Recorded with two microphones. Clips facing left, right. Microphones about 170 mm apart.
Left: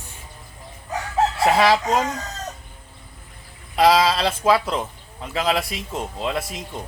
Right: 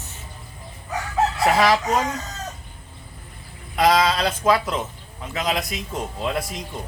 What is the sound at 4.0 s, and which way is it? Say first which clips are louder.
Speech: left 1 dB; 30° left (ahead or behind).